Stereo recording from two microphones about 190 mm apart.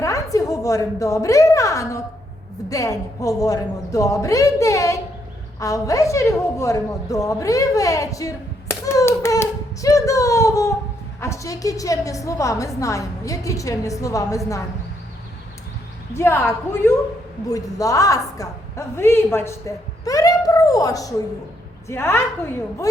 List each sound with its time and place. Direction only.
0.0 s a woman's voice: 15° left (ahead or behind)
16.1 s a woman's voice: 15° left (ahead or behind)
17.5 s a woman's voice: 20° left (ahead or behind)